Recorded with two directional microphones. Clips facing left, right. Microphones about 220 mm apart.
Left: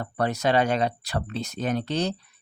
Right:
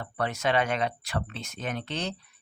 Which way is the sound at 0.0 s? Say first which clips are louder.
Left 4 dB; 40° left (ahead or behind).